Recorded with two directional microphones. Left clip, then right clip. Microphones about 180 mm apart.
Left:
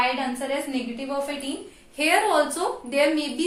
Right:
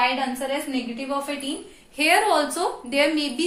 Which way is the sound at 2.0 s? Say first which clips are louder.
Right 1 dB; 15° right (ahead or behind).